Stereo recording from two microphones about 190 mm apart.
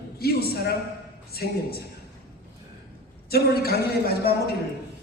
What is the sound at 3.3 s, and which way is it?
A man's voice, 55° left (ahead or behind).